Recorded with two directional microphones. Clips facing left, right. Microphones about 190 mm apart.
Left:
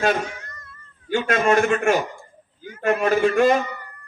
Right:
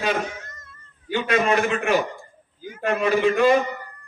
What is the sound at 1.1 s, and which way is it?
A man's voice, 45° left (ahead or behind).